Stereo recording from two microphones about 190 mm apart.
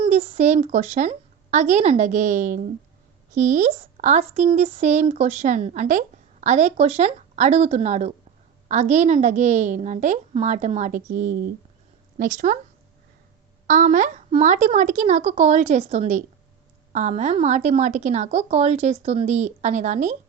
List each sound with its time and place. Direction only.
0.0 s a woman's voice: 30° right (ahead or behind)
13.7 s speech: 40° right (ahead or behind)